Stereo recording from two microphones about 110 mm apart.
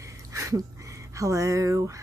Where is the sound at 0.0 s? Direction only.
30° right (ahead or behind).